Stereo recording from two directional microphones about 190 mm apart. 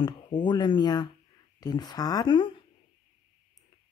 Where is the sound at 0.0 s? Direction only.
25° left (ahead or behind).